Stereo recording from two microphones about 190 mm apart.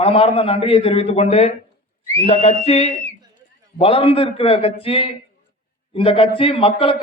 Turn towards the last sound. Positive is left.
turn(degrees=30)  # may be behind; listen again after turning